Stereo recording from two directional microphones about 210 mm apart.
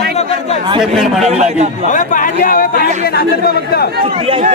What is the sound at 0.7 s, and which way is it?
Speech, centre (ahead or behind).